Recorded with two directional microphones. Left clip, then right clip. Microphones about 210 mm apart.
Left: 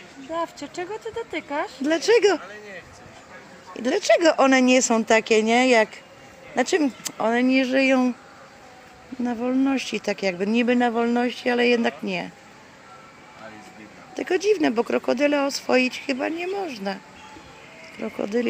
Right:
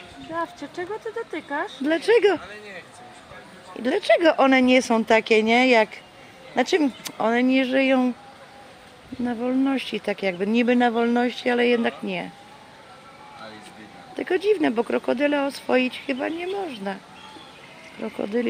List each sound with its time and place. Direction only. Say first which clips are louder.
0.6 s speech: even; 40° left (ahead or behind)
1.8 s speech: even; 5° left (ahead or behind)
3.8 s speech: even; 5° left (ahead or behind)
9.2 s speech: even; 5° left (ahead or behind)
14.2 s speech: even; 5° left (ahead or behind)
18.0 s speech: left 1 dB; 5° left (ahead or behind)